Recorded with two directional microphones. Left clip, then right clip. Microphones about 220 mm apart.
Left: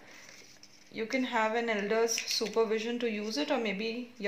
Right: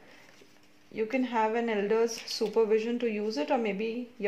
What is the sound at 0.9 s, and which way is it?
Speech, 40° right (ahead or behind).